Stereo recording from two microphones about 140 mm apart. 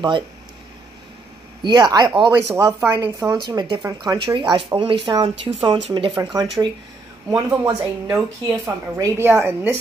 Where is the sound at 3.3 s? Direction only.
30° right (ahead or behind).